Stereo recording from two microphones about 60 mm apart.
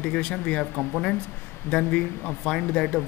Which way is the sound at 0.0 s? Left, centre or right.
Centre.